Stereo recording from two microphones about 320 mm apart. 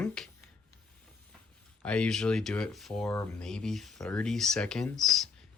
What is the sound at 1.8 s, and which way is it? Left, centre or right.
Speech, centre.